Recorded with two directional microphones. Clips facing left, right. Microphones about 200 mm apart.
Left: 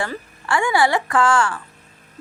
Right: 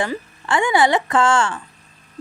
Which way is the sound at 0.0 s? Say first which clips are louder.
Right 3 dB; 20° right (ahead or behind).